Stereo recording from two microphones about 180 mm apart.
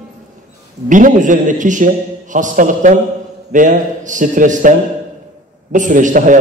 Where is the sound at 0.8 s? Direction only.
45° right (ahead or behind).